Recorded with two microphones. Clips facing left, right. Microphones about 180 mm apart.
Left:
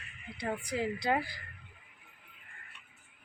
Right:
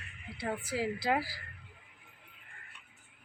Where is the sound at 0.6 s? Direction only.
5° right (ahead or behind).